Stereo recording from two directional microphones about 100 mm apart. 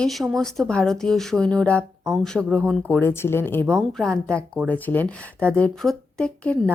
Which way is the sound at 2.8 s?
15° left (ahead or behind).